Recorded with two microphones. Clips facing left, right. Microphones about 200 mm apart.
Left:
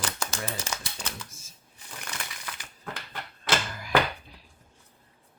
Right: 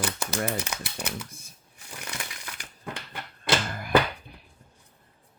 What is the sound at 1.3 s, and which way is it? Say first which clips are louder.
Shuffling cards: right 4 dB; 60° right (ahead or behind).